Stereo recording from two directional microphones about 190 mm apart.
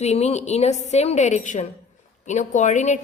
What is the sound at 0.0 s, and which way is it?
A woman's voice, 35° left (ahead or behind).